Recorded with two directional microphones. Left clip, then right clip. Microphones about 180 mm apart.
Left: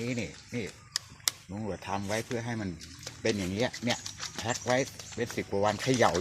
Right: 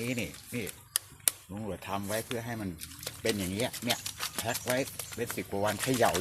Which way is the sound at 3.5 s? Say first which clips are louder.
Left 1 dB; 35° left (ahead or behind).